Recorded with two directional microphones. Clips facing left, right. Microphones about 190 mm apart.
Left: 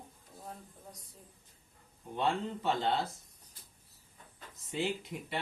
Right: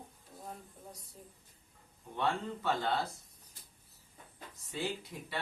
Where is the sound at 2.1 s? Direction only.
20° left (ahead or behind).